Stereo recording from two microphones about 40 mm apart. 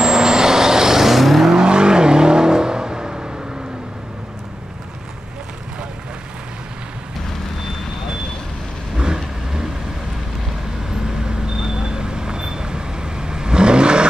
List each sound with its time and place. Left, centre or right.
0.0 s vehicle: centre
1.5 s vehicle: right
8.9 s vehicle: centre
11.2 s vehicle: centre